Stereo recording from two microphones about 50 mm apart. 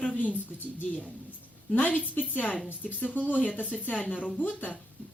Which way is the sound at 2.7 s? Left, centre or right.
Right.